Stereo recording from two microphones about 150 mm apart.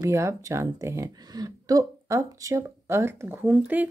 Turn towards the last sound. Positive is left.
turn(degrees=-10)  # may be behind; listen again after turning